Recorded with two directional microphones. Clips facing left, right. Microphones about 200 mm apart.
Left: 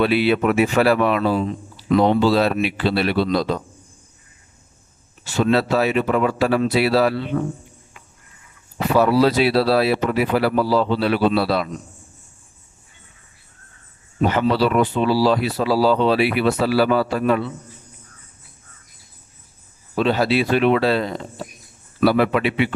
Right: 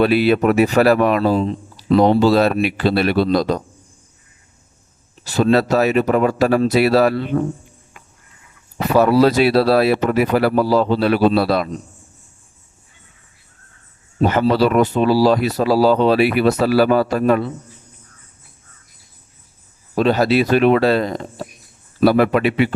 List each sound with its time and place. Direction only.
0.0 s speech: 45° right (ahead or behind)
5.2 s speech: 40° right (ahead or behind)
9.0 s speech: 45° right (ahead or behind)
14.2 s speech: 40° right (ahead or behind)
20.0 s speech: 45° right (ahead or behind)